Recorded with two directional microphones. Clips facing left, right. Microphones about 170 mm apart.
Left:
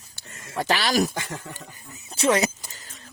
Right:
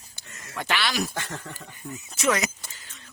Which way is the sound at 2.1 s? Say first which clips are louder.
Left 4 dB; 30° left (ahead or behind).